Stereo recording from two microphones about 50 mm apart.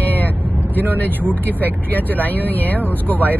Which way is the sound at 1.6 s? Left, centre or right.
Left.